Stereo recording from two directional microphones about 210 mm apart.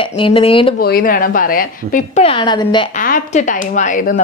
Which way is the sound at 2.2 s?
25° left (ahead or behind).